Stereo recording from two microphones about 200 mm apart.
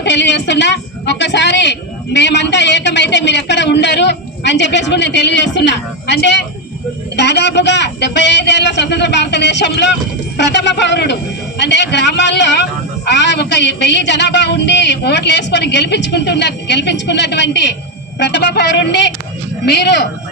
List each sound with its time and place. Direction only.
0.0 s speech: 60° left (ahead or behind)